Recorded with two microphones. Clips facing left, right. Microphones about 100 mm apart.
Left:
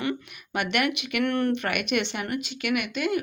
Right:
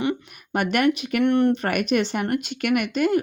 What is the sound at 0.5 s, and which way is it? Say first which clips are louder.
Speech: right 5 dB; 40° right (ahead or behind).